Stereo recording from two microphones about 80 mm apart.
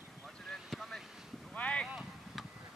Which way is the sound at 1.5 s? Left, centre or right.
Centre.